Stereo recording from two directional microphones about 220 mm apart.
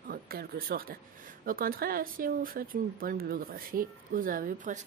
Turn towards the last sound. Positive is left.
turn(degrees=-35)  # may be behind; listen again after turning